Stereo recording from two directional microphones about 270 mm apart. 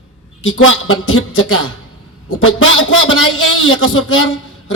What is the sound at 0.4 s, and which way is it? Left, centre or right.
A man's voice, left.